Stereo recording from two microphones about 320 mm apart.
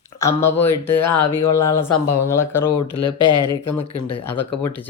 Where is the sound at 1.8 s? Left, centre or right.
Left.